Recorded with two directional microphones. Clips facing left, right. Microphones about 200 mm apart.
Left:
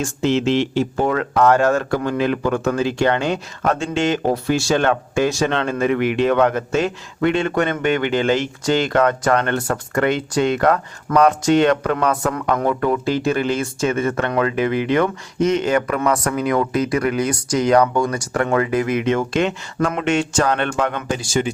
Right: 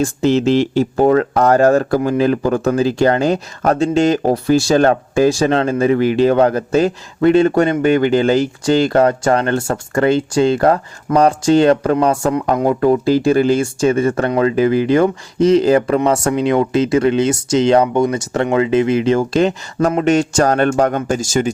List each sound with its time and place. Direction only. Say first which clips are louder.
0.0 s speech: right 4 dB; 40° right (ahead or behind)